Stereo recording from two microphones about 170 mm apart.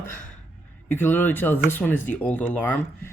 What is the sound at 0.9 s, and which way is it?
Speech, 10° left (ahead or behind).